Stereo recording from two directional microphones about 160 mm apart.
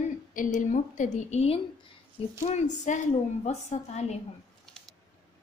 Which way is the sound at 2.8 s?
50° left (ahead or behind).